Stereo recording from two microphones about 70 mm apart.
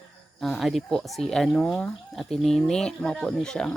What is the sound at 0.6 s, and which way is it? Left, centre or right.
Speech, centre.